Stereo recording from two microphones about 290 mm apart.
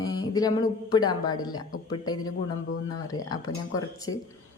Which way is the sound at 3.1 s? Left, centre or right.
Centre.